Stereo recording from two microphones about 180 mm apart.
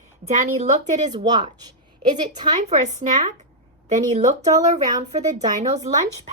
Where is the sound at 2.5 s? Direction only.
40° right (ahead or behind).